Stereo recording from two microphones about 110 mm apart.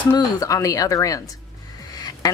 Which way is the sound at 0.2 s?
30° left (ahead or behind).